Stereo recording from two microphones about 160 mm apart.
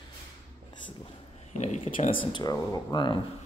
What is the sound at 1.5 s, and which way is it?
Speech, 45° left (ahead or behind).